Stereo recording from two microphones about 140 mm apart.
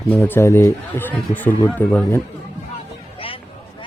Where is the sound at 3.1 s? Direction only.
40° left (ahead or behind).